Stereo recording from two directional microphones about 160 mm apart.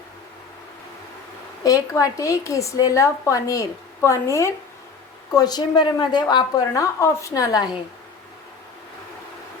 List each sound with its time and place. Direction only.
1.6 s a woman's voice: 20° left (ahead or behind)